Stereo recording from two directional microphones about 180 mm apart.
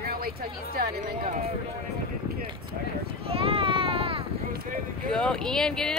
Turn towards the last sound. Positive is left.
turn(degrees=5)  # may be behind; listen again after turning